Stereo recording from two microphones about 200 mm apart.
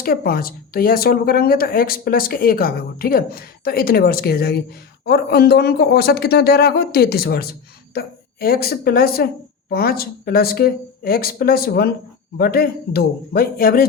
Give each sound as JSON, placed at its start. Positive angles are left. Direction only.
{"t": 0.0, "sound": "speech", "side_deg": 50}